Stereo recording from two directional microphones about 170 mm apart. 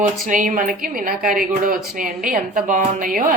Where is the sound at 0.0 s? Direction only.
50° right (ahead or behind).